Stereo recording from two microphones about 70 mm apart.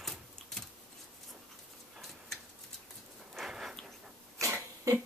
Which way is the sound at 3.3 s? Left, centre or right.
Centre.